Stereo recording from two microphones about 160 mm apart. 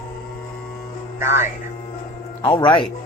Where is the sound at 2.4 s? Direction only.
30° left (ahead or behind).